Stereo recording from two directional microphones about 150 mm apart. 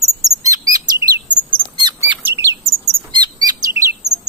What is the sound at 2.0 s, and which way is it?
Chirp, 15° right (ahead or behind).